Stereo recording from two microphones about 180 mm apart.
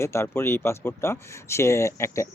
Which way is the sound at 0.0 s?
15° left (ahead or behind).